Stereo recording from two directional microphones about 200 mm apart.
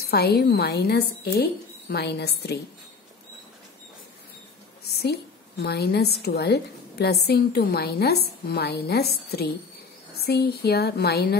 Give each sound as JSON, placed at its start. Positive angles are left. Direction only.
{"t": 0.0, "sound": "a woman's voice", "side_deg": 50}
{"t": 5.0, "sound": "a woman's voice", "side_deg": 55}